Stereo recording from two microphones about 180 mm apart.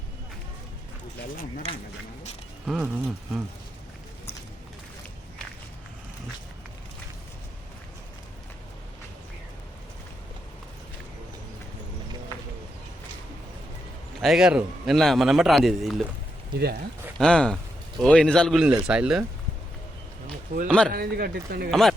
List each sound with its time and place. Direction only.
2.6 s speech: 10° right (ahead or behind)
14.2 s a man's voice: centre (ahead or behind)
17.2 s a man's voice: 5° left (ahead or behind)
20.7 s a man's voice: 5° left (ahead or behind)
20.9 s speech: 55° right (ahead or behind)
21.7 s a man's voice: centre (ahead or behind)